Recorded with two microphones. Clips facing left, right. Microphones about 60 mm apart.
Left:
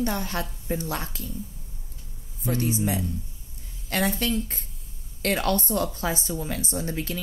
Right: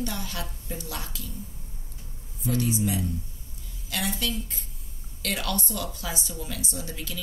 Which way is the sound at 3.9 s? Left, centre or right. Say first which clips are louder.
Left 5 dB; left.